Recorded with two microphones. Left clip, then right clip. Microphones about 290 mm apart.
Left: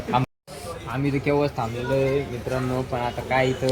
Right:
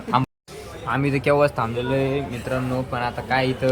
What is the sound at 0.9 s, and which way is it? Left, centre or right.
Speech, centre.